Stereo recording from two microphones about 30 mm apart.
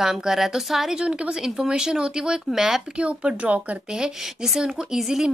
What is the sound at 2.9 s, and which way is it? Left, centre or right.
Speech, right.